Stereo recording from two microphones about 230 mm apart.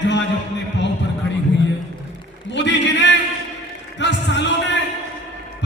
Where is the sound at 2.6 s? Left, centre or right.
Left.